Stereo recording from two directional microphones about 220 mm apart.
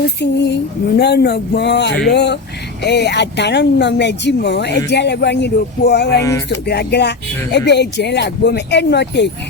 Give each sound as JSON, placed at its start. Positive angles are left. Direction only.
{"t": 0.2, "sound": "speech", "side_deg": 50}